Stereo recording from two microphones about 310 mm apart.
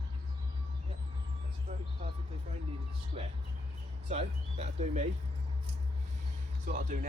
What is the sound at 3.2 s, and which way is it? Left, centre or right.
Speech, centre.